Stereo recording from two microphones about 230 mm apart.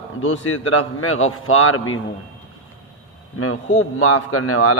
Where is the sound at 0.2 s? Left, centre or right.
Left.